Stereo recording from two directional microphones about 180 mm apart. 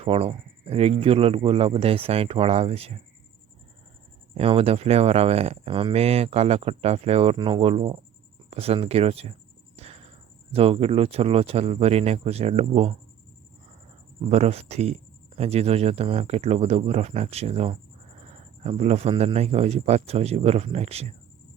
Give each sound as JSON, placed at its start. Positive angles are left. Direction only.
{"t": 0.0, "sound": "speech", "side_deg": -35}
{"t": 4.4, "sound": "speech", "side_deg": -35}
{"t": 9.7, "sound": "a sound", "side_deg": -35}
{"t": 10.5, "sound": "speech", "side_deg": -30}
{"t": 14.3, "sound": "speech", "side_deg": -35}